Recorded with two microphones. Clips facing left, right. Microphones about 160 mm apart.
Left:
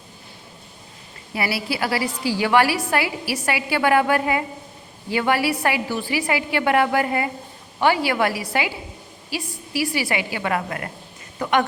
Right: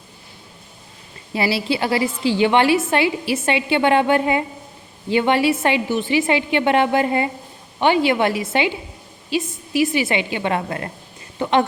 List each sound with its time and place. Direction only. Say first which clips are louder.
1.3 s a woman's voice: right 5 dB; 25° right (ahead or behind)